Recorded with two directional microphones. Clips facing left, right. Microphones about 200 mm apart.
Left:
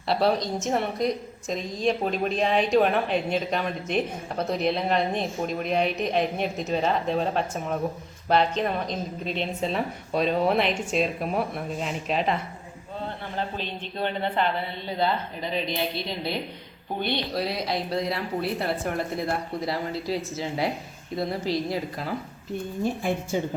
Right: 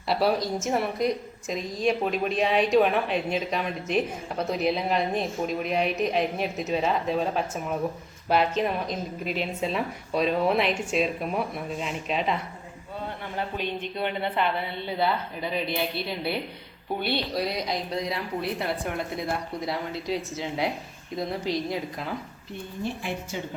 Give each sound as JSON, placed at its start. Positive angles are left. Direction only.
{"t": 0.1, "sound": "a woman's voice", "side_deg": -5}
{"t": 13.6, "sound": "speech", "side_deg": -10}
{"t": 15.4, "sound": "a woman's voice", "side_deg": -10}
{"t": 22.8, "sound": "a woman's voice", "side_deg": 45}